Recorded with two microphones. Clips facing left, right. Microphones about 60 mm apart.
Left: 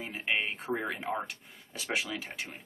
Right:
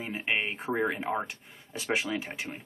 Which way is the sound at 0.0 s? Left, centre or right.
Centre.